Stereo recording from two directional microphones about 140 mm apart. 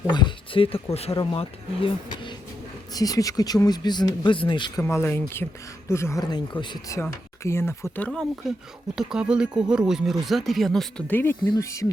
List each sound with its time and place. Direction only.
0.1 s speech: 35° left (ahead or behind)
2.9 s speech: 25° left (ahead or behind)
4.8 s speech: 15° left (ahead or behind)
6.3 s speech: 30° left (ahead or behind)
6.9 s speech: 20° left (ahead or behind)
8.0 s speech: 5° left (ahead or behind)
11.1 s speech: 15° left (ahead or behind)